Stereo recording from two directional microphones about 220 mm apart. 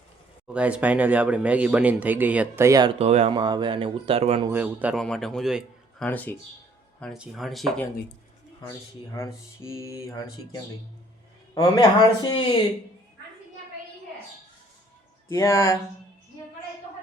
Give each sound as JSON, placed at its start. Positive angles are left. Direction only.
{"t": 0.4, "sound": "speech", "side_deg": -5}
{"t": 4.4, "sound": "a man's voice", "side_deg": -5}
{"t": 9.1, "sound": "speech", "side_deg": 10}
{"t": 15.3, "sound": "speech", "side_deg": 15}